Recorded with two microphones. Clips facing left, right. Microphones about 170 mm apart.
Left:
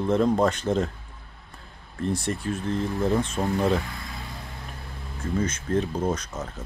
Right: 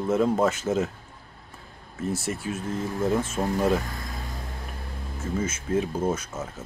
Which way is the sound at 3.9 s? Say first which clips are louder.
Right 2 dB; 45° right (ahead or behind).